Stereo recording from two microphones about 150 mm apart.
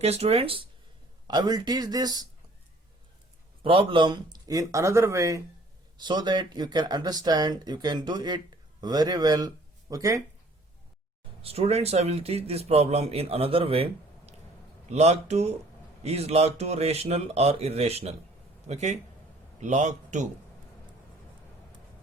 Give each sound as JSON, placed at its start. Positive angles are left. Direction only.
{"t": 0.0, "sound": "speech", "side_deg": -45}
{"t": 3.6, "sound": "speech", "side_deg": -35}
{"t": 11.4, "sound": "a man's voice", "side_deg": -45}
{"t": 14.9, "sound": "a man's voice", "side_deg": -45}